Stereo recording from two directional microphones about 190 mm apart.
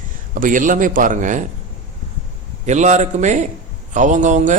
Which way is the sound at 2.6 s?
40° right (ahead or behind).